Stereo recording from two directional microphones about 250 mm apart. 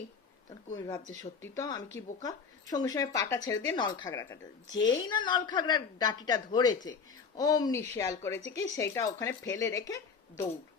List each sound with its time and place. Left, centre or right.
0.8 s speech: centre